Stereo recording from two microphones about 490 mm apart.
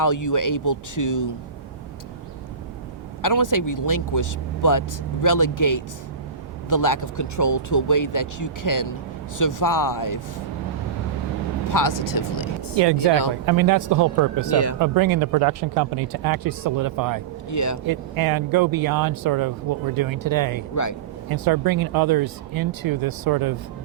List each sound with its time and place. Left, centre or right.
0.0 s speech: left
3.2 s speech: left
11.7 s speech: left
12.7 s speech: right
13.4 s speech: right
14.5 s speech: left
14.8 s speech: right
17.5 s speech: left
17.8 s speech: right